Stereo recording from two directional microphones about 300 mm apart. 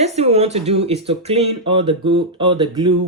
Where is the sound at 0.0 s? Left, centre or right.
Right.